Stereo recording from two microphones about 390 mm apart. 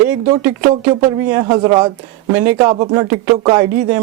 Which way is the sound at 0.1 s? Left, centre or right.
Centre.